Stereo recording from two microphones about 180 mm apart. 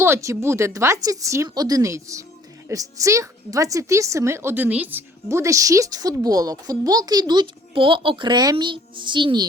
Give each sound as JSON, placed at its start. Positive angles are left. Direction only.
{"t": 0.0, "sound": "a woman's voice", "side_deg": -15}